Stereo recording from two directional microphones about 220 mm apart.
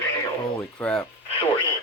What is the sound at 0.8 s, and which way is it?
Speech, 5° left (ahead or behind).